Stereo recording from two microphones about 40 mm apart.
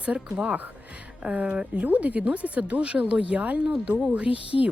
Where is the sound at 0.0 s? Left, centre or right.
Right.